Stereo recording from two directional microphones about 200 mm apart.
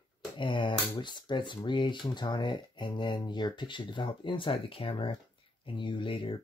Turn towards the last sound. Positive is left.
turn(degrees=25)  # may be behind; listen again after turning